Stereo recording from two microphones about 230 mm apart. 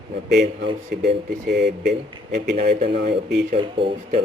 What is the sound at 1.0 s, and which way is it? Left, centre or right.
Speech, right.